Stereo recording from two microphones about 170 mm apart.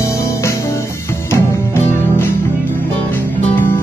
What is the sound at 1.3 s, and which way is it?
Music, 15° left (ahead or behind).